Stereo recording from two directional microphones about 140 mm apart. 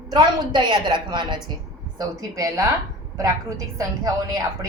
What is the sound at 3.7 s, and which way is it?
Speech, 25° right (ahead or behind).